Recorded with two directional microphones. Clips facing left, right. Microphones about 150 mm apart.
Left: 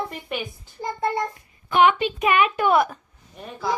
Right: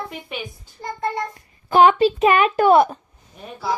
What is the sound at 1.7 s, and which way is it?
A woman's voice, 35° right (ahead or behind).